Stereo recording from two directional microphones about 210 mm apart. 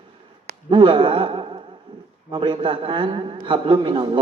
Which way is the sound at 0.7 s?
25° right (ahead or behind).